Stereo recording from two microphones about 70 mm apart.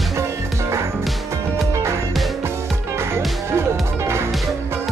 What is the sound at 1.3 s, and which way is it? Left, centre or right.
Music, right.